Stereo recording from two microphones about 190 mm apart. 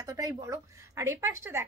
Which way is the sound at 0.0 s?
20° right (ahead or behind).